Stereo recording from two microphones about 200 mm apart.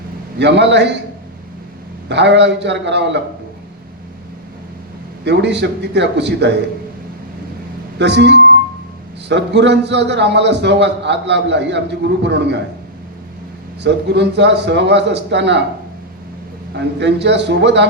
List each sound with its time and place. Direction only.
0.3 s a man's voice: 60° right (ahead or behind)
2.0 s a man's voice: 60° right (ahead or behind)
5.2 s a man's voice: 60° right (ahead or behind)
7.9 s a man's voice: 60° right (ahead or behind)
13.8 s a man's voice: 60° right (ahead or behind)
16.7 s a man's voice: 60° right (ahead or behind)